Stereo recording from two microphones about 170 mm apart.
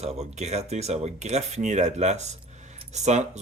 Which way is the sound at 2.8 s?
40° right (ahead or behind).